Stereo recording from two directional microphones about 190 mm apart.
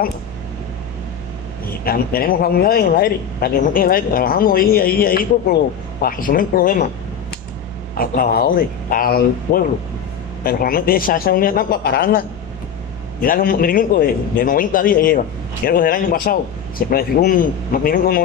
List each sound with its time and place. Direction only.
1.9 s a man's voice: 50° left (ahead or behind)
8.0 s a man's voice: 50° left (ahead or behind)